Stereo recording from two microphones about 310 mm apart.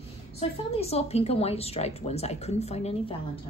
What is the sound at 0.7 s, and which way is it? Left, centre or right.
Speech, centre.